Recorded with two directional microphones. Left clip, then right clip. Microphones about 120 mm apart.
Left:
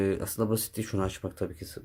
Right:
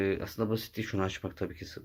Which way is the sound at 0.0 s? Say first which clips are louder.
Left 2 dB; 45° left (ahead or behind).